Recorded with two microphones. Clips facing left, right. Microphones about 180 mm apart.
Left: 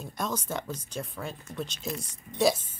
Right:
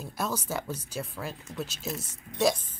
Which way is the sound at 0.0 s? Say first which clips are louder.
Even; 5° right (ahead or behind).